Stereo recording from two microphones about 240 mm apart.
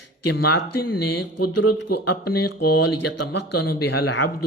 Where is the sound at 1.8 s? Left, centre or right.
Left.